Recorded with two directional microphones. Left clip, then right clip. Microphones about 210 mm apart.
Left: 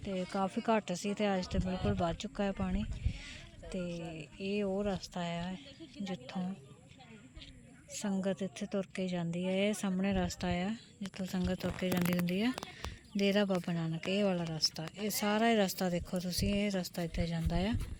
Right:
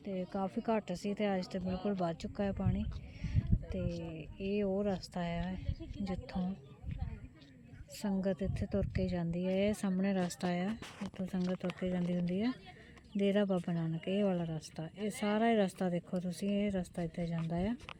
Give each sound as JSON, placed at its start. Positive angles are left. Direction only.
{"t": 0.3, "sound": "a woman's voice", "side_deg": 10}
{"t": 7.9, "sound": "speech", "side_deg": -5}